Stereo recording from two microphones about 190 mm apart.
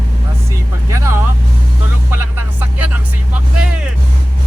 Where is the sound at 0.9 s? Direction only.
15° right (ahead or behind).